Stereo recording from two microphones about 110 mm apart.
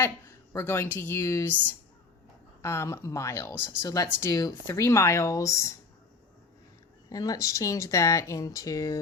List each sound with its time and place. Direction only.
0.0 s a woman's voice: 25° left (ahead or behind)
2.6 s speech: 25° left (ahead or behind)
7.1 s speech: 35° left (ahead or behind)